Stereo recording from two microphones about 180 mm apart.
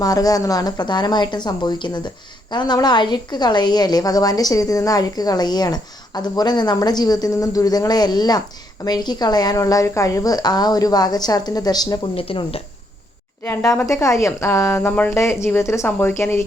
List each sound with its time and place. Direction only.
0.0 s a woman's voice: 20° left (ahead or behind)
13.4 s speech: 15° left (ahead or behind)